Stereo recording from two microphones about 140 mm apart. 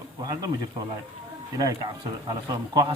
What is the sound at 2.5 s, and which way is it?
Speech, 25° right (ahead or behind).